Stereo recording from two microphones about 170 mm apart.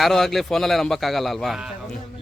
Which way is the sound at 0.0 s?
Centre (ahead or behind).